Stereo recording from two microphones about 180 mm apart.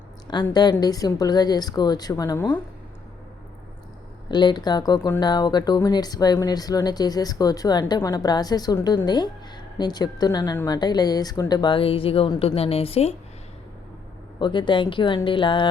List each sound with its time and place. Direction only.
0.5 s speech: 20° left (ahead or behind)
4.3 s speech: 25° left (ahead or behind)
14.3 s speech: 25° left (ahead or behind)